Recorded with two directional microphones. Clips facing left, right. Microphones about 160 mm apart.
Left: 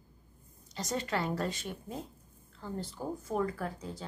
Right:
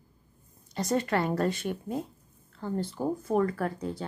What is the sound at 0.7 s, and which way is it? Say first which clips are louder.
Speech: right 7 dB; 55° right (ahead or behind).